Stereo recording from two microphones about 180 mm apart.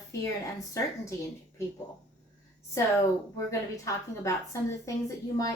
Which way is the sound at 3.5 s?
15° left (ahead or behind).